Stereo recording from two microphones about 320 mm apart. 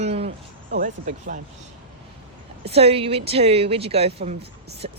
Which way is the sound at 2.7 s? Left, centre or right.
Centre.